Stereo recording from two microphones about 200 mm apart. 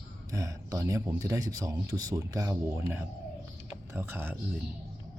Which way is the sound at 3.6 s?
10° right (ahead or behind).